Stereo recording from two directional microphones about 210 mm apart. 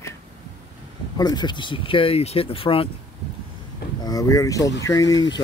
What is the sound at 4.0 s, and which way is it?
Speech, 15° left (ahead or behind).